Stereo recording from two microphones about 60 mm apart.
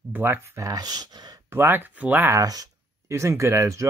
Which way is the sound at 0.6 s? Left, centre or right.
Right.